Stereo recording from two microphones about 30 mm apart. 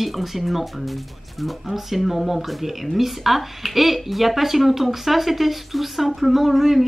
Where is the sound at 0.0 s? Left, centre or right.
Centre.